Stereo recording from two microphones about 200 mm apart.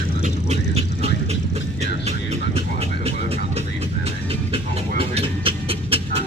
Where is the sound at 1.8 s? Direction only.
30° right (ahead or behind).